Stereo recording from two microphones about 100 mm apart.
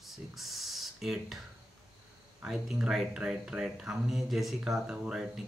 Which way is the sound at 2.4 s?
5° right (ahead or behind).